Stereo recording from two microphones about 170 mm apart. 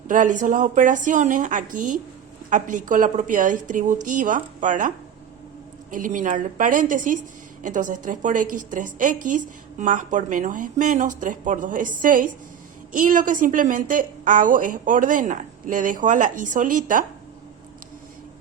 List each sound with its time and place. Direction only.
0.1 s a woman's voice: 50° right (ahead or behind)
5.9 s a woman's voice: 50° right (ahead or behind)